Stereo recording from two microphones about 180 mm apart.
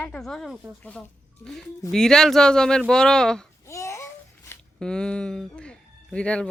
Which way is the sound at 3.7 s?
15° left (ahead or behind).